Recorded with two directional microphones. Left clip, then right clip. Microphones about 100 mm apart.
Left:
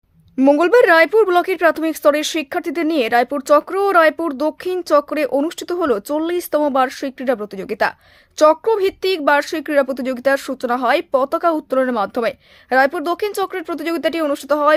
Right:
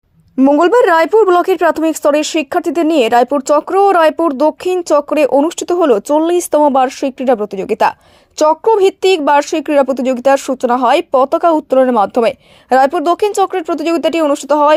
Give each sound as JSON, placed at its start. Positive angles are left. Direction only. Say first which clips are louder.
{"t": 0.3, "sound": "a woman's voice", "louder": "right 3 dB", "side_deg": -15}
{"t": 0.6, "sound": "speech", "louder": "right 2 dB", "side_deg": -35}